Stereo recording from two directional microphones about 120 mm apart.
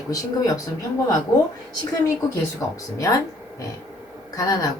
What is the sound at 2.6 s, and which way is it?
Speech, 25° left (ahead or behind).